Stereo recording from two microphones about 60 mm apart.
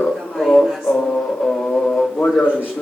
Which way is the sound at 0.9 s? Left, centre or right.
Centre.